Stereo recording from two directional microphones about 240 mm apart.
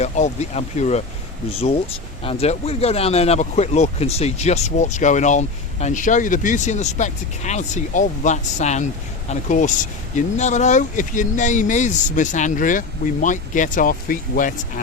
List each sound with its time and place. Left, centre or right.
0.0 s speech: left